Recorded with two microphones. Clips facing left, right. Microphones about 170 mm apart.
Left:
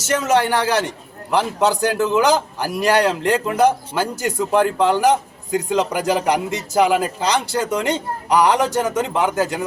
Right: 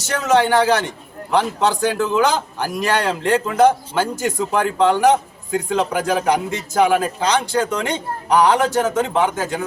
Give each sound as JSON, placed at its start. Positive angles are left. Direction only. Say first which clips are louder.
{"t": 0.3, "sound": "a man's voice", "louder": "right 4 dB", "side_deg": 10}